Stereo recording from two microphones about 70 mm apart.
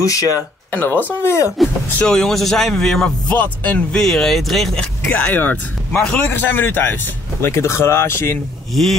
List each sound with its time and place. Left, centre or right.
0.0 s speech: left
0.7 s speech: left
1.6 s a man's voice: centre
3.3 s speech: centre
4.0 s speech: centre
5.1 s speech: left
5.9 s a man's voice: centre
6.1 s speech: left
7.4 s speech: left